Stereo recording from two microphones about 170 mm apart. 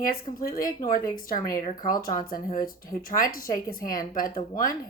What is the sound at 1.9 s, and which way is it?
Speech, 55° left (ahead or behind).